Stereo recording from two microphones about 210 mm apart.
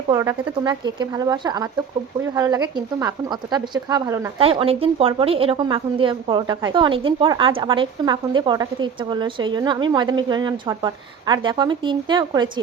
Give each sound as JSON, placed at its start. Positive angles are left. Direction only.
{"t": 0.1, "sound": "a woman's voice", "side_deg": -15}
{"t": 4.4, "sound": "a woman's voice", "side_deg": -25}